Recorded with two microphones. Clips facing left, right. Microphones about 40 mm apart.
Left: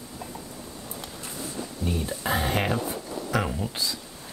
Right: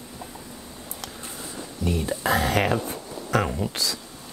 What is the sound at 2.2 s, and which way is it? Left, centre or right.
Speech, right.